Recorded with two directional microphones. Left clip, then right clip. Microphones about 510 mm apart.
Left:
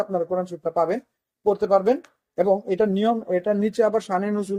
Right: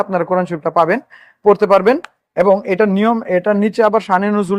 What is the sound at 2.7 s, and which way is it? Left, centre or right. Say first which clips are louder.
Speech: right 7 dB; right.